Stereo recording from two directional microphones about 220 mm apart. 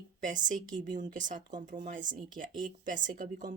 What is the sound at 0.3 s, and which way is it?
Speech, 35° right (ahead or behind).